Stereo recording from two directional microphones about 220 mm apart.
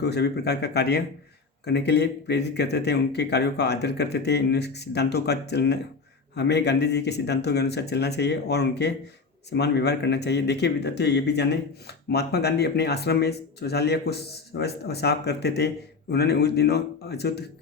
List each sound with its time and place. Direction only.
0.0 s speech: 50° left (ahead or behind)